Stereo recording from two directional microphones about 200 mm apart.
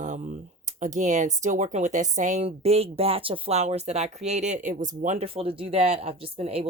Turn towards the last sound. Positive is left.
turn(degrees=-30)  # may be behind; listen again after turning